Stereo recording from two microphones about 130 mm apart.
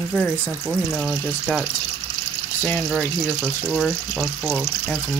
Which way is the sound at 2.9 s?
5° left (ahead or behind).